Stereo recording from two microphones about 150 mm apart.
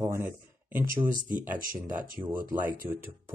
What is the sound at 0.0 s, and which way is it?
Speech, 20° right (ahead or behind).